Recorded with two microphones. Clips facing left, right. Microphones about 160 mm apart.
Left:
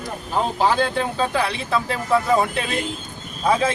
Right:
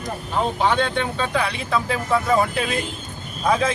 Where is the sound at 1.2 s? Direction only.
Centre (ahead or behind).